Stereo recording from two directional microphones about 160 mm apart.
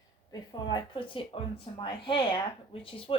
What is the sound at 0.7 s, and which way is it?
Speech, 30° left (ahead or behind).